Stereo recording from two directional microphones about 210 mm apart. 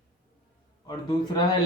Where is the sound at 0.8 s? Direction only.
20° left (ahead or behind).